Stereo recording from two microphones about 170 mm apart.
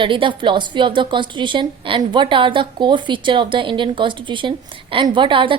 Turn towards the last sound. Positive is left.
turn(degrees=-30)  # may be behind; listen again after turning